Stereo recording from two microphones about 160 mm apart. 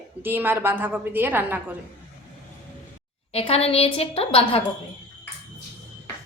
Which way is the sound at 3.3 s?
40° left (ahead or behind).